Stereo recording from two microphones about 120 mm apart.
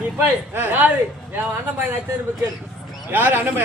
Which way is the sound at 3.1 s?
15° right (ahead or behind).